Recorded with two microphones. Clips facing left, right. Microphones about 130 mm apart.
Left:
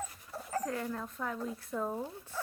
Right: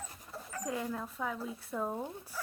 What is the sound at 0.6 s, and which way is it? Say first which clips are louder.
A woman's voice: even; 10° right (ahead or behind).